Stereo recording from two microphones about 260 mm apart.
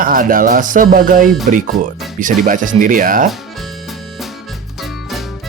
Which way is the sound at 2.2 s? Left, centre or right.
Right.